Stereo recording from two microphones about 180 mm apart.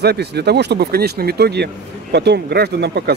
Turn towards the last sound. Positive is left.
turn(degrees=-65)  # may be behind; listen again after turning